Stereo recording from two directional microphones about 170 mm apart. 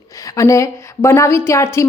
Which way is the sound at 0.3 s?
20° left (ahead or behind).